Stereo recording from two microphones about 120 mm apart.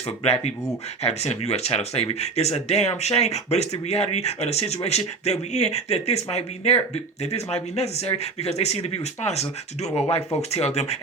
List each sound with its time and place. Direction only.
1.0 s speech: 60° left (ahead or behind)